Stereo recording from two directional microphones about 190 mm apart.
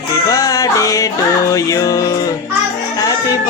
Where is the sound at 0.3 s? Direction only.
20° left (ahead or behind).